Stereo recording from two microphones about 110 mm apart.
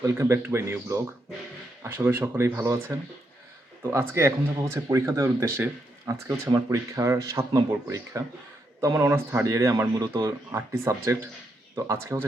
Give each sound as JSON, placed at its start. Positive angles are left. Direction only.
{"t": 0.0, "sound": "speech", "side_deg": -25}
{"t": 4.1, "sound": "speech", "side_deg": -20}